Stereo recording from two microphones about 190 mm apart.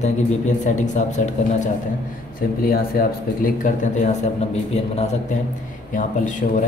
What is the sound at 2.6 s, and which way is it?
Speech, 50° left (ahead or behind).